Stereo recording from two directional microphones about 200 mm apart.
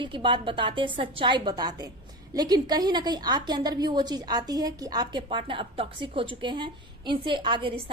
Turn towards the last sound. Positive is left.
turn(degrees=-25)  # may be behind; listen again after turning